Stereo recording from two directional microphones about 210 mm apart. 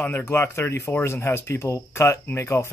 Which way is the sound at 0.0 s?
10° left (ahead or behind).